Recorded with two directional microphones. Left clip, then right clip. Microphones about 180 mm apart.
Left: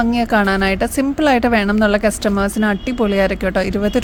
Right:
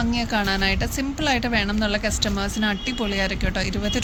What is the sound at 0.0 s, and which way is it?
A woman's voice, 60° left (ahead or behind).